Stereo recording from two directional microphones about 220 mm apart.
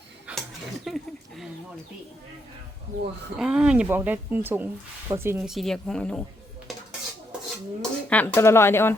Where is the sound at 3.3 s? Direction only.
5° right (ahead or behind).